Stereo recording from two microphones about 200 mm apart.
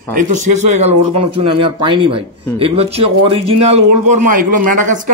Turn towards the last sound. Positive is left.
turn(degrees=-40)  # may be behind; listen again after turning